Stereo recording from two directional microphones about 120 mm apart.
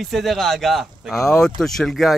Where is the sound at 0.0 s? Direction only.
Centre (ahead or behind).